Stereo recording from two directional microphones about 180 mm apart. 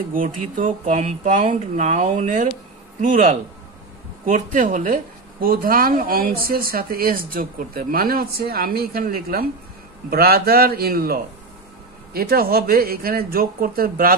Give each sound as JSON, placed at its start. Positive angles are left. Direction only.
{"t": 0.1, "sound": "speech", "side_deg": -50}